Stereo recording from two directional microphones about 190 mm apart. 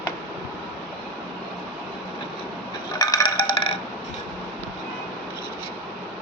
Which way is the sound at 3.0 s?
20° left (ahead or behind).